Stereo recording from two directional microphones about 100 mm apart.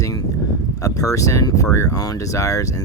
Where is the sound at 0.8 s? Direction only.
35° left (ahead or behind).